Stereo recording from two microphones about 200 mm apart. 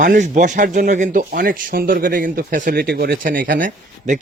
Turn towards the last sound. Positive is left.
turn(degrees=-40)  # may be behind; listen again after turning